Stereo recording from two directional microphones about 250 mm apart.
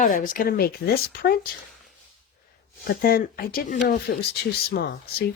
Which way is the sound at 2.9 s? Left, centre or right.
Left.